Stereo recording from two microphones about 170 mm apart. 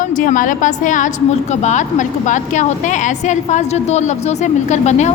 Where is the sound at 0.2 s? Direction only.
50° left (ahead or behind).